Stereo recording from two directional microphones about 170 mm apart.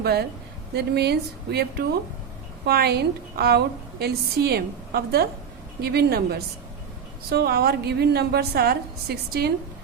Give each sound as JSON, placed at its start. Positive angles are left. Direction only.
{"t": 0.0, "sound": "a woman's voice", "side_deg": -70}